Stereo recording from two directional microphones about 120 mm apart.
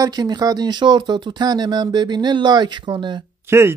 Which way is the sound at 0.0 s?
35° right (ahead or behind).